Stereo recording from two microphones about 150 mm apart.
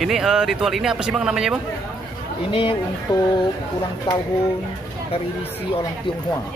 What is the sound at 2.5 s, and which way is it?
Speech, 35° left (ahead or behind).